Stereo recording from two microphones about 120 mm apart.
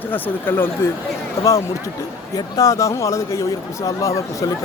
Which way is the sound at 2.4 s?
30° left (ahead or behind).